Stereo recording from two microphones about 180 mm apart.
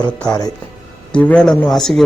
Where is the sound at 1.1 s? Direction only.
5° left (ahead or behind).